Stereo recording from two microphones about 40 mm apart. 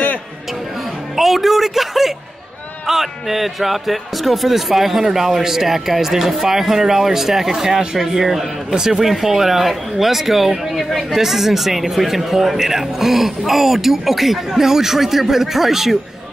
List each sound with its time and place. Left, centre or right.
1.1 s speech: centre
8.2 s speech: centre